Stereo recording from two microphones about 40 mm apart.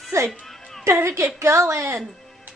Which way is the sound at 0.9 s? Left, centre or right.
Right.